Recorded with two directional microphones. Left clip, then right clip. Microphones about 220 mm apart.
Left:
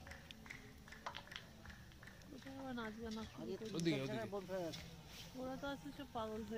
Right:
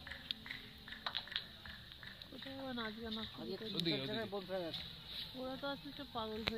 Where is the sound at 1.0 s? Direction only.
35° left (ahead or behind).